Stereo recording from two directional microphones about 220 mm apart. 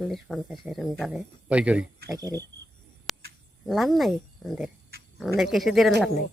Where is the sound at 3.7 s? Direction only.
Centre (ahead or behind).